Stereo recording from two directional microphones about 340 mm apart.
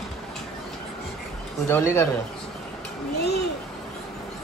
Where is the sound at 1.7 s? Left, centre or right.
Centre.